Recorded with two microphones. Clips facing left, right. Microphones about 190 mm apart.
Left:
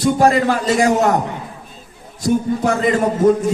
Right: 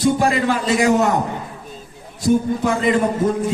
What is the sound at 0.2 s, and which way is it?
Speech, 45° left (ahead or behind).